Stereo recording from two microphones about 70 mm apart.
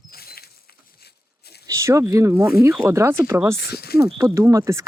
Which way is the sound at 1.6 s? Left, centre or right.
Right.